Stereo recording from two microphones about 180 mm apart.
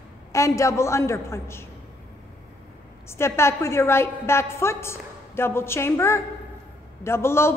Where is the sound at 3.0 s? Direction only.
15° left (ahead or behind).